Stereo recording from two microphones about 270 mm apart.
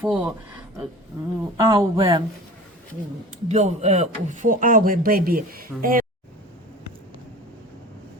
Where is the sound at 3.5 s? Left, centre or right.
Right.